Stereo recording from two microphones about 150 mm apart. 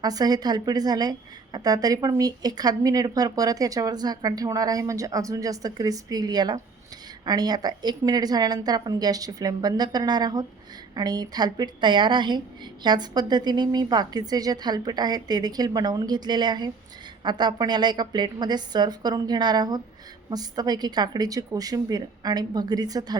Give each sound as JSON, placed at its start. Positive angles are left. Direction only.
{"t": 0.0, "sound": "speech", "side_deg": -25}